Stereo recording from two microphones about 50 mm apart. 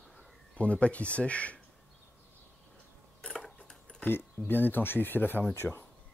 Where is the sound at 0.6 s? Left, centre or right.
Left.